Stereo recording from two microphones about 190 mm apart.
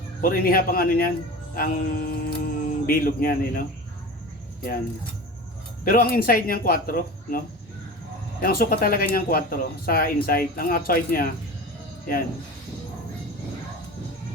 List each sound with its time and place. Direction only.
0.2 s speech: 50° left (ahead or behind)
5.8 s speech: 50° left (ahead or behind)